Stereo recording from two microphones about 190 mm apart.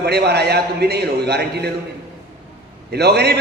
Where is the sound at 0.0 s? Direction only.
60° right (ahead or behind).